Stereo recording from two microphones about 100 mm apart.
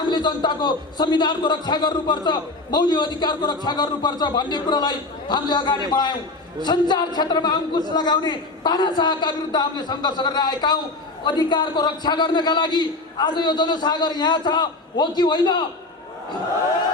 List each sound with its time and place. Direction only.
0.0 s a man's voice: 45° left (ahead or behind)